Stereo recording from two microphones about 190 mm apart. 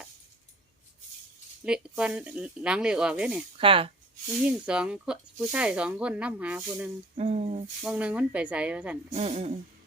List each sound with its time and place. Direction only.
1.6 s speech: 5° right (ahead or behind)
3.6 s speech: 30° right (ahead or behind)
4.4 s speech: 5° right (ahead or behind)
7.2 s a sound: 35° right (ahead or behind)
7.8 s speech: 5° right (ahead or behind)
9.1 s a sound: 35° right (ahead or behind)